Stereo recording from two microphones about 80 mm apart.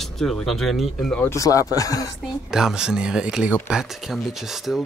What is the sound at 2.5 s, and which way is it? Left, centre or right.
Speech, centre.